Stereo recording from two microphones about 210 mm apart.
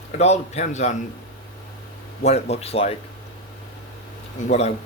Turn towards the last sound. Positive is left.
turn(degrees=35)  # may be behind; listen again after turning